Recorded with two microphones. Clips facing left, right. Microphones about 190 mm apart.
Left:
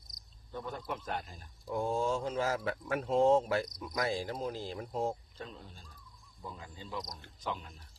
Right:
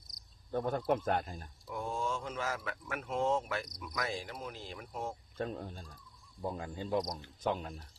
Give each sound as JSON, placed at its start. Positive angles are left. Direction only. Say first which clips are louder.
{"t": 0.5, "sound": "speech", "louder": "right 8 dB", "side_deg": -50}
{"t": 1.6, "sound": "speech", "louder": "left 5 dB", "side_deg": 30}
{"t": 5.4, "sound": "speech", "louder": "right 8 dB", "side_deg": -50}